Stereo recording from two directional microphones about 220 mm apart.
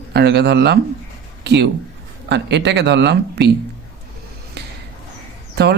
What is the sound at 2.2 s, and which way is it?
Speech, 50° right (ahead or behind).